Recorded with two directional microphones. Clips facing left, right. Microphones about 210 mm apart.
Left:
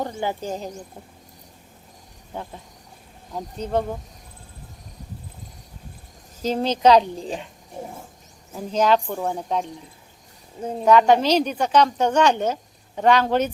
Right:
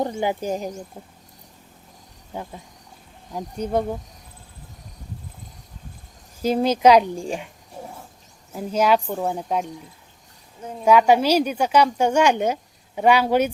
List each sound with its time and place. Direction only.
0.0 s a woman's voice: 15° right (ahead or behind)
3.3 s a woman's voice: 10° right (ahead or behind)
6.4 s a woman's voice: 10° right (ahead or behind)
8.5 s a woman's voice: 10° right (ahead or behind)
10.6 s speech: 30° left (ahead or behind)
10.8 s a woman's voice: 10° right (ahead or behind)